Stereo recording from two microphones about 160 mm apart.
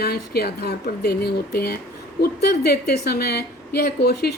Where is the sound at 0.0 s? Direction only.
80° left.